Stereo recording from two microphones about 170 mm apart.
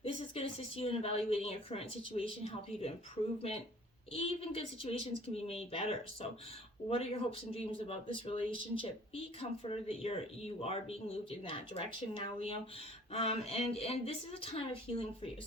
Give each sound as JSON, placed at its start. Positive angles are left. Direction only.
{"t": 0.3, "sound": "speech", "side_deg": 35}
{"t": 4.1, "sound": "speech", "side_deg": 35}